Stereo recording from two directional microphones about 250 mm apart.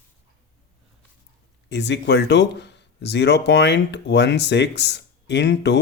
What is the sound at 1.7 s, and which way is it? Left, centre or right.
Speech, left.